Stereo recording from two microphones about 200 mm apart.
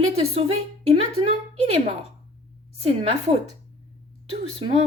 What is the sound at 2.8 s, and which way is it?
Speech, 30° right (ahead or behind).